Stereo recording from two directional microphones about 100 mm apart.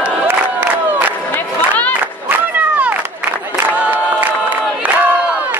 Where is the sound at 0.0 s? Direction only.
15° right (ahead or behind).